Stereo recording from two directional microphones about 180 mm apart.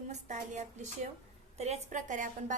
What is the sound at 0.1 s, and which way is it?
A woman's voice, 40° right (ahead or behind).